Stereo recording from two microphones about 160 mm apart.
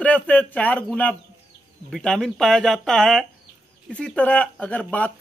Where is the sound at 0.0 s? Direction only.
10° left (ahead or behind).